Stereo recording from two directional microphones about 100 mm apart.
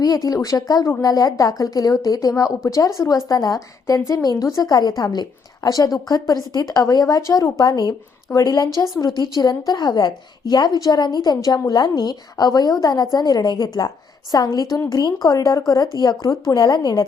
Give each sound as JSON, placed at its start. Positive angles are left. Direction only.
{"t": 0.0, "sound": "a woman's voice", "side_deg": 35}